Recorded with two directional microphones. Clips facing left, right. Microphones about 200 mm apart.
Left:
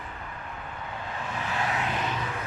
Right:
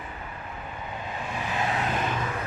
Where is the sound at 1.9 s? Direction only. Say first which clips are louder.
Right 2 dB; 50° right (ahead or behind).